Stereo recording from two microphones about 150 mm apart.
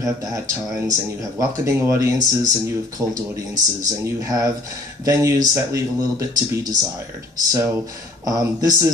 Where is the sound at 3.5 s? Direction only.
25° right (ahead or behind).